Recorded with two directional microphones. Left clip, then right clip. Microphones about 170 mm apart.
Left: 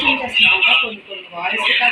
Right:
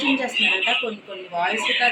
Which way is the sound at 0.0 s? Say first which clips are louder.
Left 6 dB; 35° left (ahead or behind).